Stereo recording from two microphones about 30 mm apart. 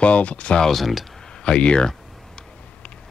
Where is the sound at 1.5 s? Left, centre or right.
Left.